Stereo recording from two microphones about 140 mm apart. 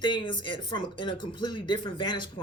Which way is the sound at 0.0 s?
35° left (ahead or behind).